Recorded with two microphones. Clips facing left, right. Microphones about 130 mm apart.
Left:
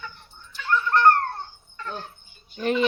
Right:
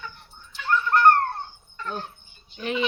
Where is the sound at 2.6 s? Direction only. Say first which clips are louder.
Left 4 dB; 45° left (ahead or behind).